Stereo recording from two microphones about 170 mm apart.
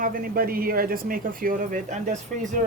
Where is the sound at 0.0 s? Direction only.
55° right (ahead or behind).